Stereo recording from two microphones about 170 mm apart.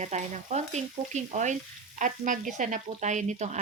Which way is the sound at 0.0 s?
40° right (ahead or behind).